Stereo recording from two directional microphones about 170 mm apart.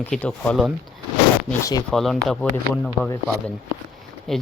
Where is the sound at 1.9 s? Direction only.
Centre (ahead or behind).